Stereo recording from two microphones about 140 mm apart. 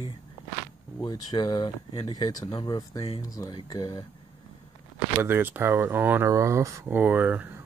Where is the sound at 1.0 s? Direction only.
30° left (ahead or behind).